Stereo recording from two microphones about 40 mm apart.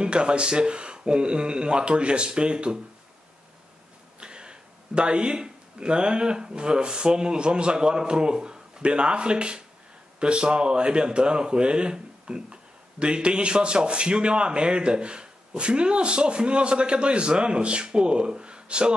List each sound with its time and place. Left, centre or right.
0.0 s a man's voice: right
4.2 s a man's voice: right